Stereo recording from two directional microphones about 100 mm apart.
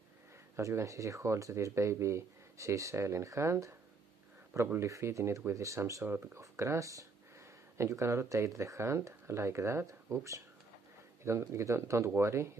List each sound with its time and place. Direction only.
0.6 s speech: 30° right (ahead or behind)
4.7 s speech: 30° right (ahead or behind)
6.0 s speech: 20° right (ahead or behind)
6.4 s speech: 30° right (ahead or behind)